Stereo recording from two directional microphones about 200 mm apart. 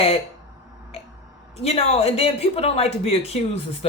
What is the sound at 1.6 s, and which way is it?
Speech, 30° left (ahead or behind).